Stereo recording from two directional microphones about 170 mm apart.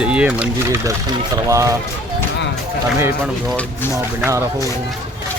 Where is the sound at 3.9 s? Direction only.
15° right (ahead or behind).